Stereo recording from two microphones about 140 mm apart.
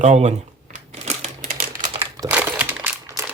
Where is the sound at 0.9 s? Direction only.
50° right (ahead or behind).